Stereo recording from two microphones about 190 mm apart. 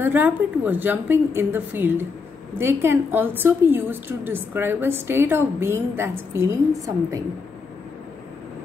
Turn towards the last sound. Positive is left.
turn(degrees=-15)  # may be behind; listen again after turning